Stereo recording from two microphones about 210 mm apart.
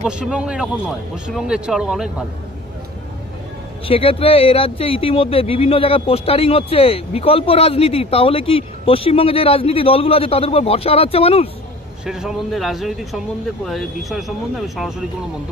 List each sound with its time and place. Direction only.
0.0 s speech: 5° right (ahead or behind)
3.8 s speech: 25° left (ahead or behind)
12.0 s speech: 5° right (ahead or behind)